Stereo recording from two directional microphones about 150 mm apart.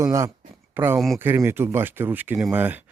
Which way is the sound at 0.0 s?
20° right (ahead or behind).